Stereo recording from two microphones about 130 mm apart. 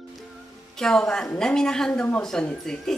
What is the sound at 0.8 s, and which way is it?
Speech, 5° left (ahead or behind).